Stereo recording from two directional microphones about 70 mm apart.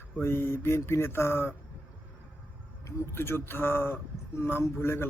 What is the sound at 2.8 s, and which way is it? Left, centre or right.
Speech, left.